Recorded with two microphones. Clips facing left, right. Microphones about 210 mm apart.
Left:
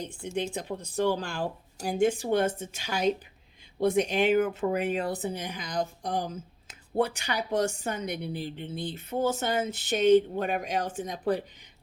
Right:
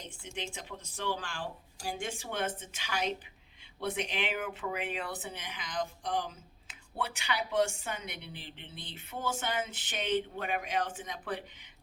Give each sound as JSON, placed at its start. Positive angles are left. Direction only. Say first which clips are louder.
{"t": 0.3, "sound": "speech", "louder": "left 10 dB", "side_deg": 40}